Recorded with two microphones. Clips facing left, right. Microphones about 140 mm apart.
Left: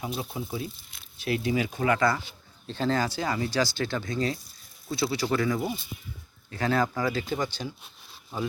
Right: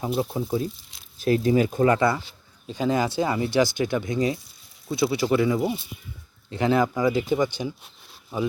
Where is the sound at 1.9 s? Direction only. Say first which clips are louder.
Right 3 dB; 25° right (ahead or behind).